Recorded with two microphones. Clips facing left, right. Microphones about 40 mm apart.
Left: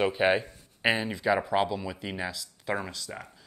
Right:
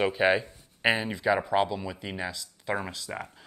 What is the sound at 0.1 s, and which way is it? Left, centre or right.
Speech, centre.